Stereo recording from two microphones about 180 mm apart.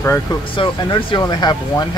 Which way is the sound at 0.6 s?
30° left (ahead or behind).